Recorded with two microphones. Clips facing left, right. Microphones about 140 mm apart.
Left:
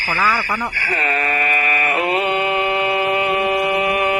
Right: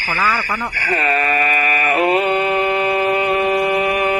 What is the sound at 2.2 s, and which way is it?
Mantra, 45° right (ahead or behind).